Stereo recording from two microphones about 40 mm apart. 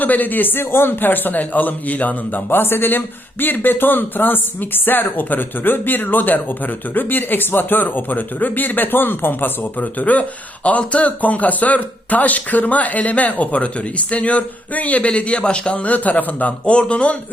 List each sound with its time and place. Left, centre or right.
0.0 s speech: left
2.5 s speech: left
9.8 s speech: left
16.5 s speech: left